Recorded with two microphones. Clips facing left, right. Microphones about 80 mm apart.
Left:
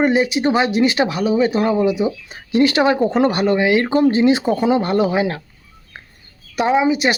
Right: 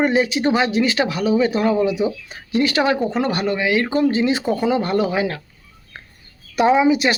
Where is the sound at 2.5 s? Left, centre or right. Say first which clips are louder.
Left 3 dB; left.